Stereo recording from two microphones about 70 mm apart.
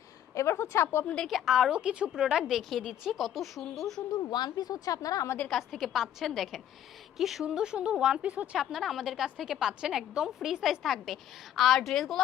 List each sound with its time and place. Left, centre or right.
0.3 s speech: left
1.0 s a woman's voice: centre
1.3 s a woman's voice: centre
4.1 s speech: left
5.7 s a woman's voice: centre
8.5 s a woman's voice: centre